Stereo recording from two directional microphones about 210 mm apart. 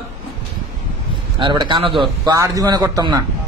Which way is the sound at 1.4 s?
20° right (ahead or behind).